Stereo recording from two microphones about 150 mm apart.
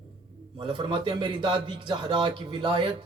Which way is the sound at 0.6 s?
30° right (ahead or behind).